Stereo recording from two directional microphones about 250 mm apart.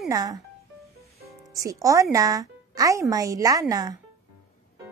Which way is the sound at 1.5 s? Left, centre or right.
Centre.